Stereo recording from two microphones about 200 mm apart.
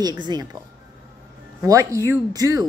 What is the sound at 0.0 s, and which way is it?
Speech, 20° right (ahead or behind).